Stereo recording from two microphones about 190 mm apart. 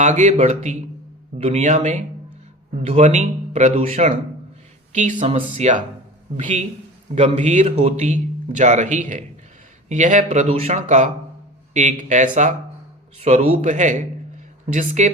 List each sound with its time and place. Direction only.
0.0 s a man's voice: 40° right (ahead or behind)